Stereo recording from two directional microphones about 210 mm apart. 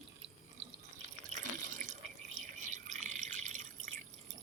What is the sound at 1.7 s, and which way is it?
Drip, 35° right (ahead or behind).